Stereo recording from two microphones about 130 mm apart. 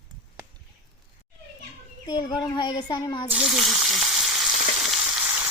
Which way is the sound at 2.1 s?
35° left (ahead or behind).